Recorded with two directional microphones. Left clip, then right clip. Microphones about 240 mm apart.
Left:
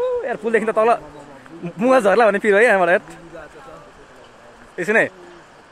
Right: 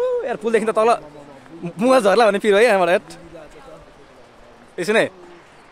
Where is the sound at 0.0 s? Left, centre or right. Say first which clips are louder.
Even; centre.